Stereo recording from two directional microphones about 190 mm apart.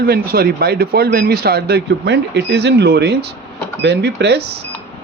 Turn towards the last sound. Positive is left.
turn(degrees=-60)  # may be behind; listen again after turning